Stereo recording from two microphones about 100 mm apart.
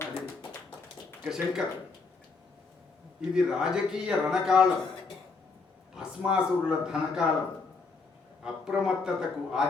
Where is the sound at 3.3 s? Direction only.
5° right (ahead or behind).